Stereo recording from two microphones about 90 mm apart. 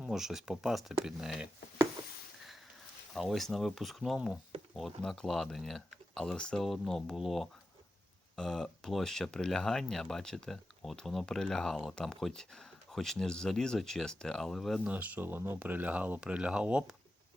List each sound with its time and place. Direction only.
0.0 s speech: 5° right (ahead or behind)
3.2 s speech: centre (ahead or behind)
14.8 s speech: 15° right (ahead or behind)